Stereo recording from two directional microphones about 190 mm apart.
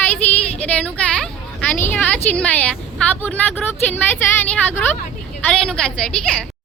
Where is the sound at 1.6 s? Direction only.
10° left (ahead or behind).